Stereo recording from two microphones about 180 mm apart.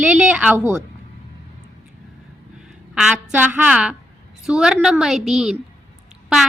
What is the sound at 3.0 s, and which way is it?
A woman's voice, 5° right (ahead or behind).